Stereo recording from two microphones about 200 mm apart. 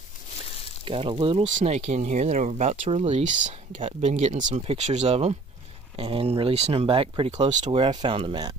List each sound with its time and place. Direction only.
0.8 s speech: 25° right (ahead or behind)
1.4 s speech: 40° right (ahead or behind); by 8.5 s 20° right (ahead or behind)